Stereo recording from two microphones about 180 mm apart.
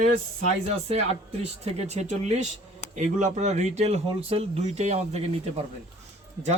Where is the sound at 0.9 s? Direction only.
35° right (ahead or behind).